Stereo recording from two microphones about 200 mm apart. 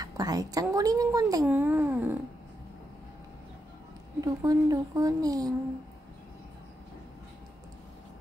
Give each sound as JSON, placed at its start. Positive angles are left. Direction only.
{"t": 0.0, "sound": "a woman's voice", "side_deg": -20}
{"t": 4.2, "sound": "a woman's voice", "side_deg": -20}